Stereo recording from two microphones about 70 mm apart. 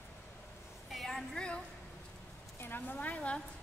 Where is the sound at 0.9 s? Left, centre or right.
Centre.